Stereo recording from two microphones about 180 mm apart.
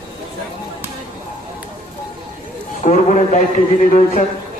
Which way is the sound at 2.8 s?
45° left (ahead or behind).